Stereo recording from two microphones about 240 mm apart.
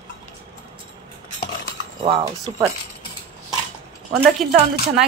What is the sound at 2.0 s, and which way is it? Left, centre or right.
Speech, centre.